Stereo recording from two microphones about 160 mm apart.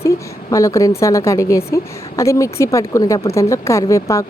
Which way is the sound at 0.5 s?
20° left (ahead or behind).